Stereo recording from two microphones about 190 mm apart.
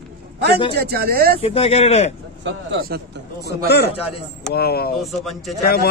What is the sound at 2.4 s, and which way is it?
Speech, 60° right (ahead or behind).